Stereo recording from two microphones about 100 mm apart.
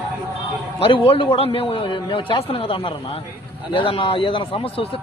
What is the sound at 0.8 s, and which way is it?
Speech, 60° left (ahead or behind).